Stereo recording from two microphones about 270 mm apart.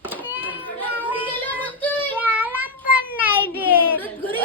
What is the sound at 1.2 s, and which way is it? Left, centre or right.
Child singing, centre.